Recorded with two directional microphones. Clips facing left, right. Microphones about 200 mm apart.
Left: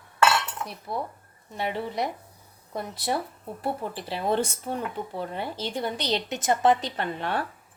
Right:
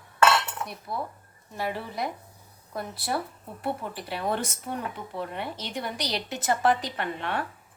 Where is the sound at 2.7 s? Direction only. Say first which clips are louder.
Left 2 dB; 25° left (ahead or behind).